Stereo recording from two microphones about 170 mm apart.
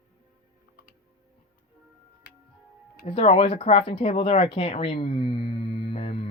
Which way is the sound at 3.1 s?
35° left (ahead or behind).